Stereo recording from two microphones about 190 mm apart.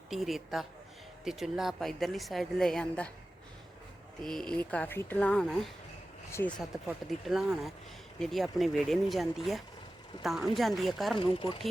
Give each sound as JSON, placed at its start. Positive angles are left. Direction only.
{"t": 0.1, "sound": "speech", "side_deg": 0}
{"t": 4.2, "sound": "speech", "side_deg": 0}
{"t": 11.2, "sound": "speech", "side_deg": 30}